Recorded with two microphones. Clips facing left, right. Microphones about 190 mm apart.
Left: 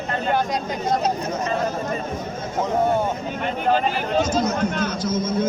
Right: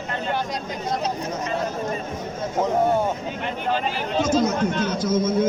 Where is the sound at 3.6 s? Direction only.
50° left (ahead or behind).